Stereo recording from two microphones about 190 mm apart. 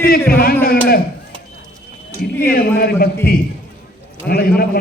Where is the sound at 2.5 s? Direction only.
50° left (ahead or behind).